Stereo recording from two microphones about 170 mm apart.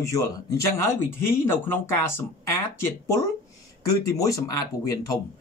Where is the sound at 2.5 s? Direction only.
15° left (ahead or behind).